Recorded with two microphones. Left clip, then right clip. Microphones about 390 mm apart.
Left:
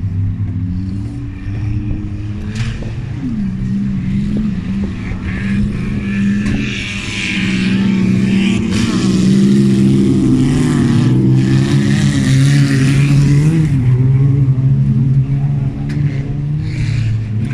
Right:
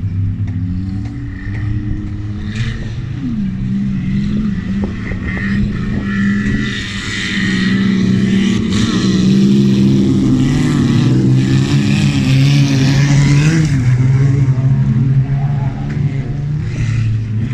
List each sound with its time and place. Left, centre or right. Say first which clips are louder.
6.0 s vehicle: right 1 dB; centre; by 14.3 s right